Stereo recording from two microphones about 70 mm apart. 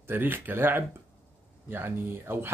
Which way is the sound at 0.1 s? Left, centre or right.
Right.